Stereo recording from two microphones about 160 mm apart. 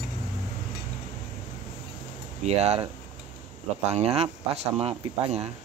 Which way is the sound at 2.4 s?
40° right (ahead or behind).